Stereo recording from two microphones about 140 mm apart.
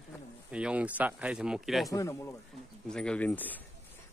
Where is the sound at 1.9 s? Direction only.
25° left (ahead or behind).